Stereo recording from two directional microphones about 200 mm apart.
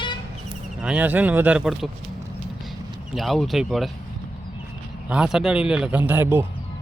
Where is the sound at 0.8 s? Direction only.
5° right (ahead or behind).